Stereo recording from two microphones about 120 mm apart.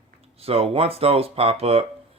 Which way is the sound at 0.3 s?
55° right (ahead or behind).